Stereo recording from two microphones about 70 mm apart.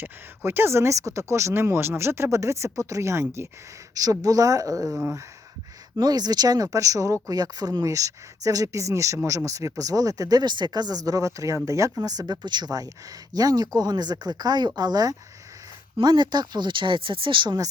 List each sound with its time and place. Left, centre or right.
0.0 s speech: right
3.9 s speech: right
4.9 s speech: right
6.0 s speech: right